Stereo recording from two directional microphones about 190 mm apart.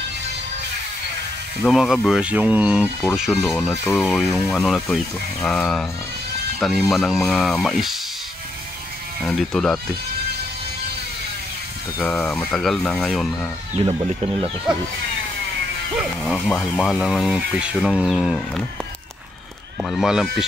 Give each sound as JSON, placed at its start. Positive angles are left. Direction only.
{"t": 1.7, "sound": "speech", "side_deg": 0}
{"t": 3.8, "sound": "speech", "side_deg": 10}
{"t": 4.1, "sound": "speech", "side_deg": 0}
{"t": 6.9, "sound": "speech", "side_deg": 0}
{"t": 9.2, "sound": "speech", "side_deg": 0}
{"t": 12.0, "sound": "speech", "side_deg": 5}
{"t": 13.7, "sound": "speech", "side_deg": -30}
{"t": 16.0, "sound": "speech", "side_deg": 0}
{"t": 19.8, "sound": "speech", "side_deg": 0}